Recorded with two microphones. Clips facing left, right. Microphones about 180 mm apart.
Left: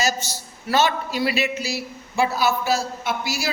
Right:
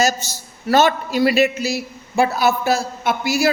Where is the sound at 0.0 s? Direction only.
45° right (ahead or behind).